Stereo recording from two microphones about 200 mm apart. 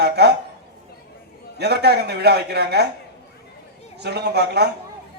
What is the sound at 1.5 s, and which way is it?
A man's voice, 55° right (ahead or behind).